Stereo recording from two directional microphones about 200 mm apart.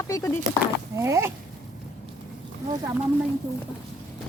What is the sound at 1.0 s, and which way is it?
Speech, 15° right (ahead or behind).